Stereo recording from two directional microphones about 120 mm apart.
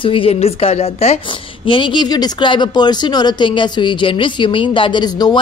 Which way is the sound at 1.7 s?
40° left (ahead or behind).